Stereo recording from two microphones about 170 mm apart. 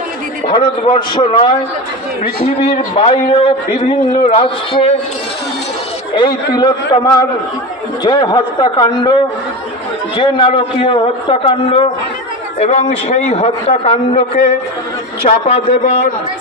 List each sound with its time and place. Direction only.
0.5 s a man's voice: 30° left (ahead or behind)
2.6 s a man's voice: 35° left (ahead or behind)
6.1 s a man's voice: 25° left (ahead or behind)
10.1 s a man's voice: 30° left (ahead or behind)